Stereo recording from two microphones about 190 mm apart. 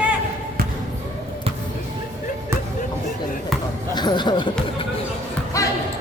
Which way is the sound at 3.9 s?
25° left (ahead or behind).